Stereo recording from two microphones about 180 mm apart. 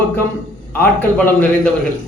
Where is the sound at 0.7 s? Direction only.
10° left (ahead or behind).